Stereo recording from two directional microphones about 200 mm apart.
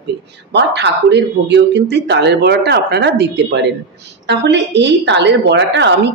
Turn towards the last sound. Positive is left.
turn(degrees=-60)  # may be behind; listen again after turning